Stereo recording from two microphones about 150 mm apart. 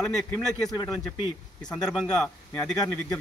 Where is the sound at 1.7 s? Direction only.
5° left (ahead or behind).